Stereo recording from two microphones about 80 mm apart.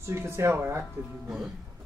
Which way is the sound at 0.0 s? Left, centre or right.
Right.